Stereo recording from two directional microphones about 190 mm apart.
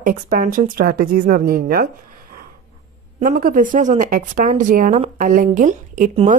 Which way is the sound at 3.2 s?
45° right (ahead or behind).